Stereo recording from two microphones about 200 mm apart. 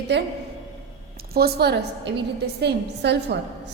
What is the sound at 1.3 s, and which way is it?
A woman's voice, 50° right (ahead or behind).